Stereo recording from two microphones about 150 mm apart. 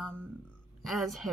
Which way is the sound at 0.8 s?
Centre (ahead or behind).